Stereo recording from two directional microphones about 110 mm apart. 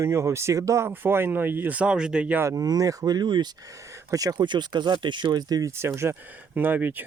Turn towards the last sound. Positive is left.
turn(degrees=-15)  # may be behind; listen again after turning